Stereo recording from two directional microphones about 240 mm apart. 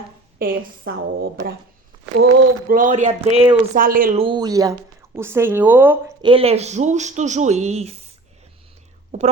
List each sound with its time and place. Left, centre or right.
0.3 s a woman's voice: right
2.6 s speech: right
3.8 s a woman's voice: right
4.2 s speech: centre
6.2 s speech: right
9.1 s speech: right